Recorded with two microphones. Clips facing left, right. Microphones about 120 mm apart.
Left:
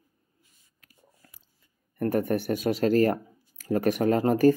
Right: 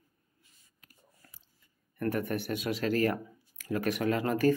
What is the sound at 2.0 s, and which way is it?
Speech, 40° left (ahead or behind).